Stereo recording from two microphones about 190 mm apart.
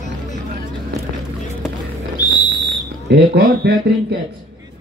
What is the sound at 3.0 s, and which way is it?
Speech, 60° right (ahead or behind).